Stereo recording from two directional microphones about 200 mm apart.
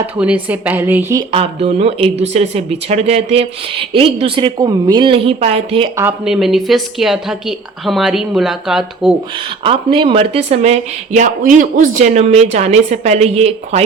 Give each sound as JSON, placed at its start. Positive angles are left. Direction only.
{"t": 0.2, "sound": "speech", "side_deg": -5}
{"t": 1.3, "sound": "speech", "side_deg": -30}
{"t": 6.0, "sound": "a woman's voice", "side_deg": -5}
{"t": 9.6, "sound": "speech", "side_deg": -25}